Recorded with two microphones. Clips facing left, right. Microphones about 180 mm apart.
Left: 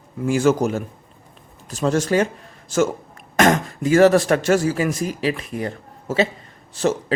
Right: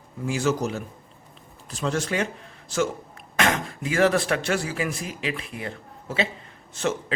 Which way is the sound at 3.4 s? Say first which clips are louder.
Left 8 dB; 45° left (ahead or behind).